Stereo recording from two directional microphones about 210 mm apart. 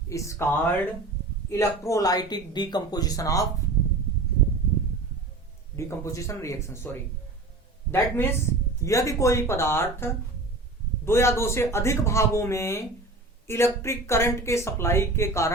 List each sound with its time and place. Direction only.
0.1 s speech: 15° left (ahead or behind)
5.7 s speech: 15° left (ahead or behind)